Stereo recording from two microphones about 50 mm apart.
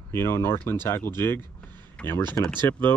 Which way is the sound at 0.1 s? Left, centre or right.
Left.